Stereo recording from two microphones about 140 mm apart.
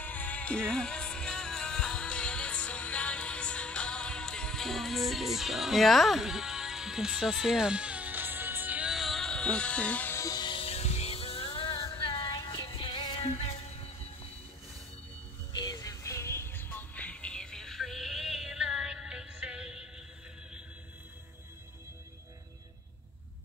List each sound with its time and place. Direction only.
0.0 s music: 10° left (ahead or behind); by 13.2 s 30° left (ahead or behind)
13.2 s music: 50° left (ahead or behind)
15.5 s music: 25° left (ahead or behind); by 19.9 s 5° right (ahead or behind)